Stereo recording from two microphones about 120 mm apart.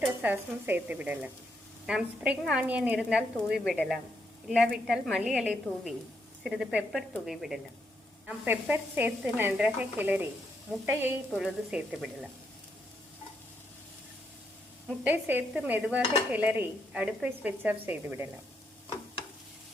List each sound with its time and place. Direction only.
0.0 s a woman's voice: 15° right (ahead or behind)
8.3 s a woman's voice: 15° right (ahead or behind)
10.8 s sizzle: 20° right (ahead or behind)
11.3 s a woman's voice: 5° right (ahead or behind)
15.0 s a woman's voice: 15° right (ahead or behind)